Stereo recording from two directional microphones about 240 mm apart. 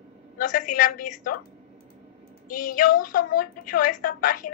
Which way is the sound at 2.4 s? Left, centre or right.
Left.